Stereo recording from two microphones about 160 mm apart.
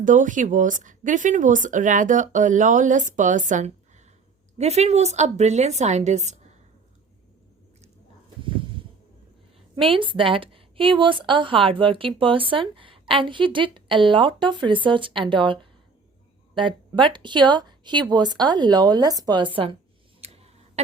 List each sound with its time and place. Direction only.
0.0 s speech: 55° right (ahead or behind)
9.7 s a woman's voice: 30° right (ahead or behind)
16.6 s speech: 30° right (ahead or behind)
20.2 s a sound: 40° right (ahead or behind)